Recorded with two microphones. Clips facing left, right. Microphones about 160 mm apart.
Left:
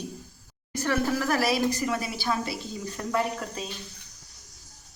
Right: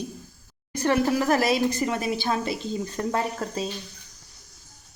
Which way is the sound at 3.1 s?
35° right (ahead or behind).